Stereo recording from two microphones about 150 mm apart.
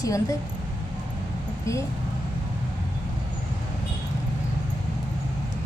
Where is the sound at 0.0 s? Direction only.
20° left (ahead or behind).